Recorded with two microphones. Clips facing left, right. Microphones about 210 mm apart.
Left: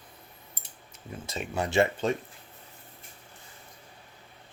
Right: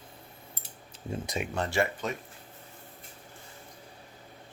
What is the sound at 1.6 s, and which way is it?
Speech, 25° left (ahead or behind).